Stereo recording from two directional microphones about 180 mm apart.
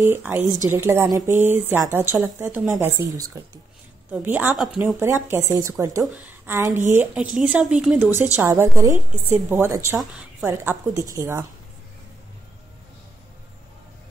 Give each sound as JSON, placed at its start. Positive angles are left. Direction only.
{"t": 0.0, "sound": "speech", "side_deg": -10}
{"t": 8.4, "sound": "speech", "side_deg": -15}